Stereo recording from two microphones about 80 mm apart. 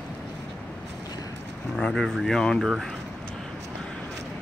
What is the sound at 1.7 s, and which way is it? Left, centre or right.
Speech, centre.